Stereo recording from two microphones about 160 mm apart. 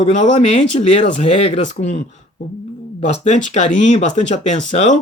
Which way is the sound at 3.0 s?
45° left (ahead or behind).